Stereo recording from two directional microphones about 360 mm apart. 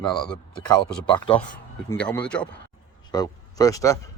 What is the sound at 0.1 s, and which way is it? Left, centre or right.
Speech, centre.